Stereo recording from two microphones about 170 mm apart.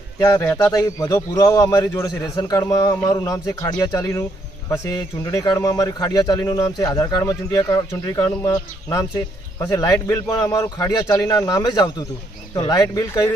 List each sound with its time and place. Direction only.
0.2 s a man's voice: 15° left (ahead or behind)